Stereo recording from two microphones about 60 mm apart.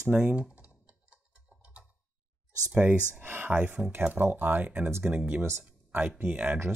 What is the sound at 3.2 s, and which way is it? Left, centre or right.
Speech, right.